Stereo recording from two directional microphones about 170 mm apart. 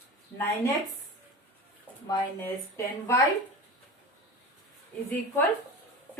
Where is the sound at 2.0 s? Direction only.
15° left (ahead or behind).